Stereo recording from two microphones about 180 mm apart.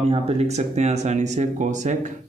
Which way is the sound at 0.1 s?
35° right (ahead or behind).